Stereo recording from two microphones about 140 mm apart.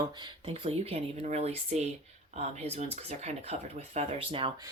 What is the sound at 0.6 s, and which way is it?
Speech, 45° right (ahead or behind).